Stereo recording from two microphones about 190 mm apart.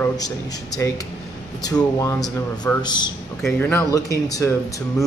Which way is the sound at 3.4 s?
10° left (ahead or behind).